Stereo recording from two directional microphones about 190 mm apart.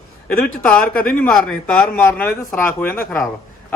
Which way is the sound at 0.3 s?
10° left (ahead or behind).